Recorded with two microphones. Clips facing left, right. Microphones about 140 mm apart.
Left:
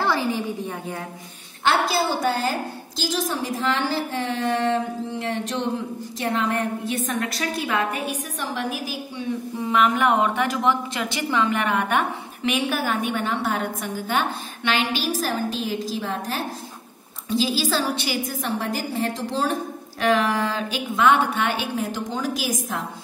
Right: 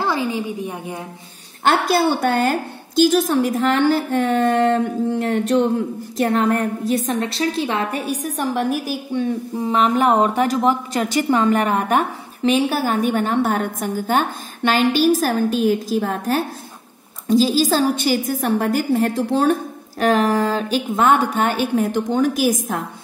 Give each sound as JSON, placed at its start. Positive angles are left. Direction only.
{"t": 0.0, "sound": "a woman's voice", "side_deg": -20}
{"t": 1.6, "sound": "a woman's voice", "side_deg": -50}
{"t": 9.7, "sound": "a woman's voice", "side_deg": -35}
{"t": 20.0, "sound": "a woman's voice", "side_deg": -45}